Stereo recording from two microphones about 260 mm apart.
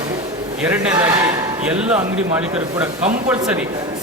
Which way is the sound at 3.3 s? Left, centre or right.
Centre.